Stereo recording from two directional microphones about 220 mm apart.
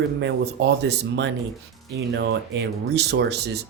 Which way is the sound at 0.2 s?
55° right (ahead or behind).